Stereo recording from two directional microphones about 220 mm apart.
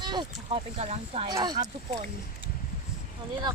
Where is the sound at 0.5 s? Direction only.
30° right (ahead or behind).